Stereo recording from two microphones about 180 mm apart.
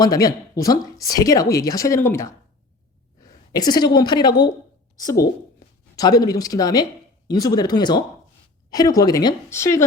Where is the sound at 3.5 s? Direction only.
20° left (ahead or behind).